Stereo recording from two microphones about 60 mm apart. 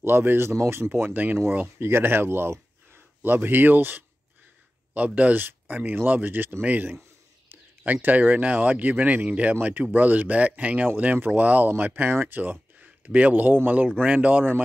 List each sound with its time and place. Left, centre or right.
0.0 s speech: right
12.8 s speech: right